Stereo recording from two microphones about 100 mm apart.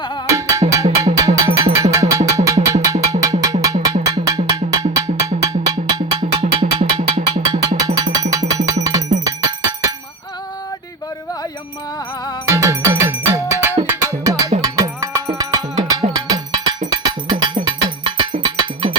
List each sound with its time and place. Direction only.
0.3 s music: 35° right (ahead or behind)
5.6 s percussion: 45° right (ahead or behind)
6.4 s music: 50° right (ahead or behind)
12.5 s music: 30° right (ahead or behind)
14.3 s music: 35° right (ahead or behind)
14.6 s cowbell: 35° right (ahead or behind); by 18.9 s 50° right (ahead or behind)